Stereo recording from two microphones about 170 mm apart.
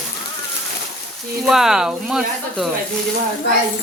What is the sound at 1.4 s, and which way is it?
Speech, 5° right (ahead or behind).